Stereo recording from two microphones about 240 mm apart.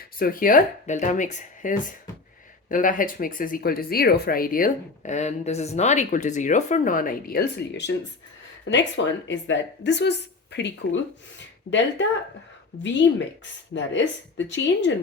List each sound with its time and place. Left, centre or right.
0.2 s a woman's voice: left